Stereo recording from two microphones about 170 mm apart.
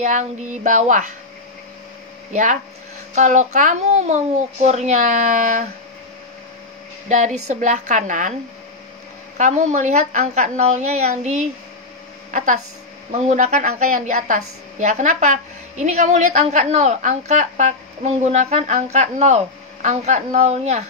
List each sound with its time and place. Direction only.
0.0 s a woman's voice: 45° right (ahead or behind)
2.3 s a woman's voice: 50° right (ahead or behind)
7.1 s a woman's voice: 45° right (ahead or behind)
9.4 s a woman's voice: 45° right (ahead or behind)